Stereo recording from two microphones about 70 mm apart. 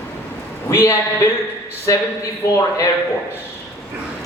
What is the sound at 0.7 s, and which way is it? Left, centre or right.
A man's voice, left.